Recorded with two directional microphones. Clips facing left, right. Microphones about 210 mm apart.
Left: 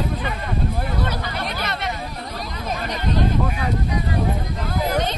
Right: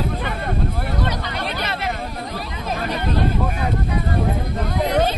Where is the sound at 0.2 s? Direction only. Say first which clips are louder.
Right 1 dB; 50° right (ahead or behind).